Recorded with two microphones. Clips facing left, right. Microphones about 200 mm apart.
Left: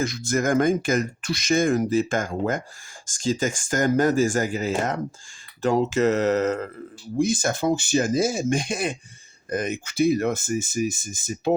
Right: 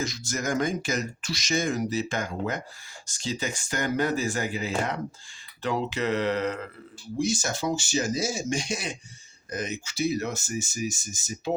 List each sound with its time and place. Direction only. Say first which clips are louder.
0.0 s speech: left 7 dB; 55° left (ahead or behind)